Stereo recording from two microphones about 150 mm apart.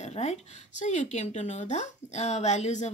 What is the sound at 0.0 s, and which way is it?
Speech, 45° left (ahead or behind).